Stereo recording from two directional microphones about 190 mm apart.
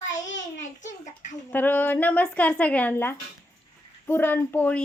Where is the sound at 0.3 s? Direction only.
40° left (ahead or behind).